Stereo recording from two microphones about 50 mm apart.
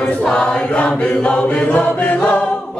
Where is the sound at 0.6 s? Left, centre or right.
Left.